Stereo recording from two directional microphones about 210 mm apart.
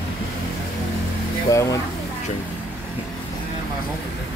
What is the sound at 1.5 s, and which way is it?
Speech, 15° left (ahead or behind).